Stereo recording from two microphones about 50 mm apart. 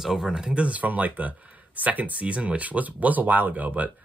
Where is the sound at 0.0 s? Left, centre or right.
Centre.